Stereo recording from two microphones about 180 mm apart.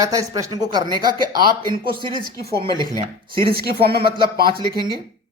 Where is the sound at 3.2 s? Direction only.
55° right (ahead or behind).